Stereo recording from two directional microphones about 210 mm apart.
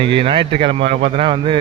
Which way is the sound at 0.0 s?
25° right (ahead or behind).